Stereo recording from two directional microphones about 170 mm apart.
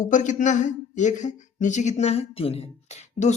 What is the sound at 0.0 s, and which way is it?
Speech, 45° left (ahead or behind).